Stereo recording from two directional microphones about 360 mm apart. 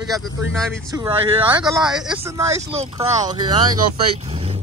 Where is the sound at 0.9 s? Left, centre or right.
Centre.